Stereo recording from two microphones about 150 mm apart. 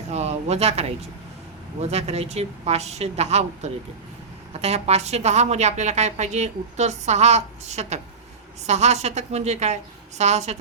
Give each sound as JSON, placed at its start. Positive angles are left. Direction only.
{"t": 0.1, "sound": "a woman's voice", "side_deg": -50}